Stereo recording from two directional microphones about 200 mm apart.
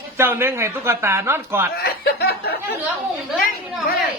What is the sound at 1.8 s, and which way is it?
Snicker, 50° left (ahead or behind).